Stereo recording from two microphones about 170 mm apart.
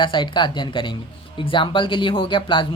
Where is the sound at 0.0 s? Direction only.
25° left (ahead or behind).